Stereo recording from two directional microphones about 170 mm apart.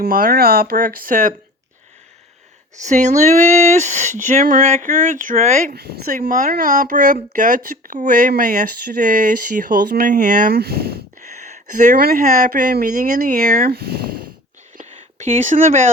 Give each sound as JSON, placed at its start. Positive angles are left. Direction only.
{"t": 0.0, "sound": "speech", "side_deg": -60}
{"t": 2.8, "sound": "speech", "side_deg": -45}
{"t": 5.7, "sound": "speech", "side_deg": -65}
{"t": 11.3, "sound": "speech", "side_deg": -45}
{"t": 14.8, "sound": "a sound", "side_deg": -45}